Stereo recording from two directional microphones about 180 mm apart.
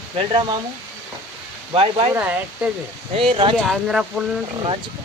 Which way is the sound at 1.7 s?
30° right (ahead or behind).